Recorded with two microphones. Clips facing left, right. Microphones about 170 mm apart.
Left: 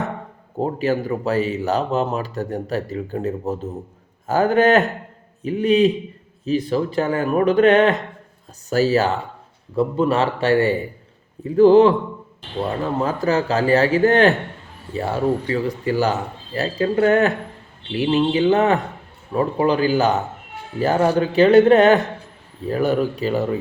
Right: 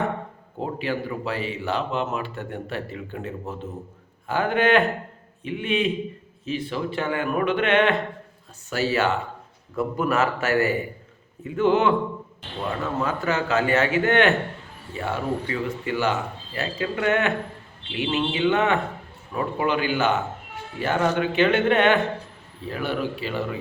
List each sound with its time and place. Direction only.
0.6 s a man's voice: 40° left (ahead or behind)